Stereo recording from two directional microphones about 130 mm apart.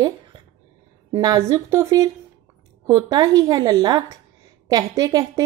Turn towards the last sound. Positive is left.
turn(degrees=-30)  # may be behind; listen again after turning